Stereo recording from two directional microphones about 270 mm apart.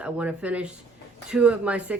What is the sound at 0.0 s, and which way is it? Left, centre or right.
Speech, centre.